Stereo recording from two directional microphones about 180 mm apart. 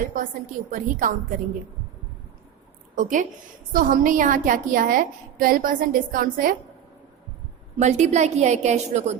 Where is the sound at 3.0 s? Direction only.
45° right (ahead or behind).